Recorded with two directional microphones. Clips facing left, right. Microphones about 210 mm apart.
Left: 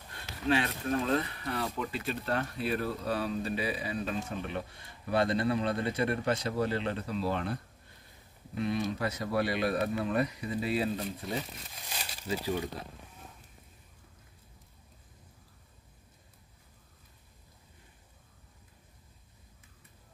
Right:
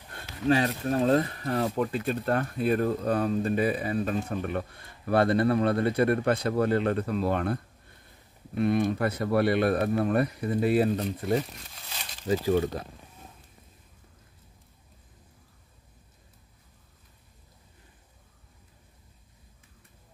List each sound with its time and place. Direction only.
0.1 s speech: 40° right (ahead or behind)